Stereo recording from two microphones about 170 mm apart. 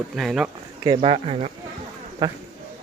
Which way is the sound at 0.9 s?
35° right (ahead or behind).